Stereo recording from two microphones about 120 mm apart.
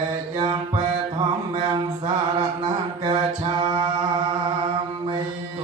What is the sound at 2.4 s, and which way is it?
Mantra, 35° right (ahead or behind).